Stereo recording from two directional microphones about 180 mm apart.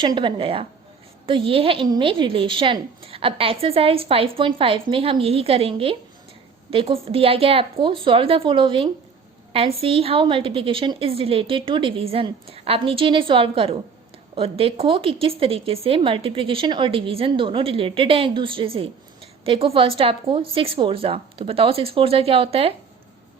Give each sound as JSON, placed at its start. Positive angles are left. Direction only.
{"t": 0.0, "sound": "a woman's voice", "side_deg": -25}